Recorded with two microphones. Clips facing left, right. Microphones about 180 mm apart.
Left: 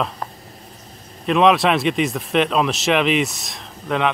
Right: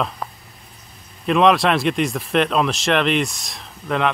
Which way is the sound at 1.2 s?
Centre (ahead or behind).